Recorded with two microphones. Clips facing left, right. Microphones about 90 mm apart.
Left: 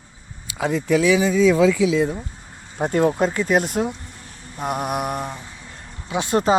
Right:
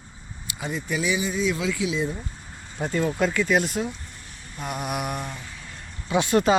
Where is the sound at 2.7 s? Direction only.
55° left (ahead or behind).